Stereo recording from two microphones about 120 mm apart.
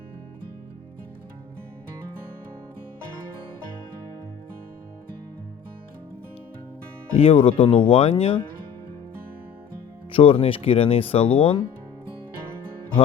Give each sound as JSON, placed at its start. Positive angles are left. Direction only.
{"t": 7.2, "sound": "speech", "side_deg": 55}
{"t": 10.1, "sound": "speech", "side_deg": 50}